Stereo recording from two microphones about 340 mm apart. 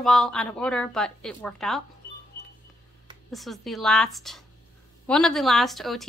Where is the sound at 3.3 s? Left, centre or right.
Centre.